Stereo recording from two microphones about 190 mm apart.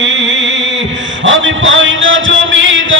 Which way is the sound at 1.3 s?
85° right.